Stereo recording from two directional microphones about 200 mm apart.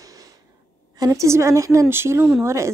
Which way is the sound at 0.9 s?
15° right (ahead or behind).